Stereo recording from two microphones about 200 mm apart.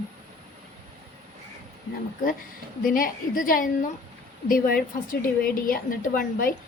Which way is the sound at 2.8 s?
45° left (ahead or behind).